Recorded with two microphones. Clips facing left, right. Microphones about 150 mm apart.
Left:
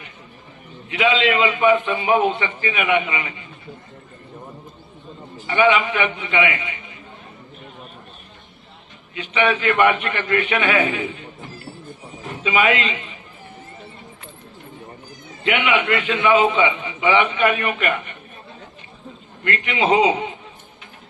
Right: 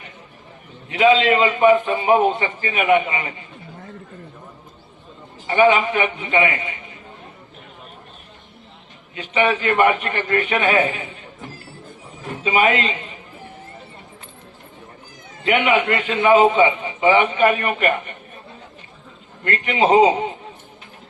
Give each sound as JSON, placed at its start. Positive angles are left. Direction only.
{"t": 0.9, "sound": "a man's voice", "side_deg": -40}
{"t": 5.5, "sound": "a man's voice", "side_deg": -40}
{"t": 9.1, "sound": "a man's voice", "side_deg": -40}
{"t": 12.4, "sound": "a man's voice", "side_deg": -40}
{"t": 15.4, "sound": "a man's voice", "side_deg": -40}
{"t": 19.5, "sound": "a man's voice", "side_deg": -40}